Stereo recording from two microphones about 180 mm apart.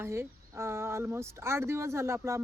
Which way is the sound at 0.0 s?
15° right (ahead or behind).